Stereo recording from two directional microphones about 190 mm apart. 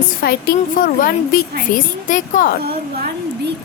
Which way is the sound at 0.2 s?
55° left (ahead or behind).